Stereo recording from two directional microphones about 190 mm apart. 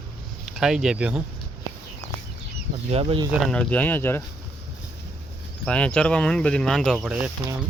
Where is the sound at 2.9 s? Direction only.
30° right (ahead or behind).